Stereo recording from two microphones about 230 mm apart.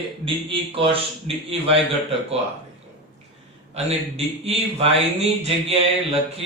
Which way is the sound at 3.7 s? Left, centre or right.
Right.